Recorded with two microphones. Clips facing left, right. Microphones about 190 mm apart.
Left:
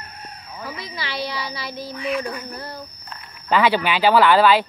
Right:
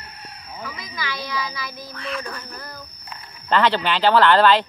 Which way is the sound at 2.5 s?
35° left (ahead or behind).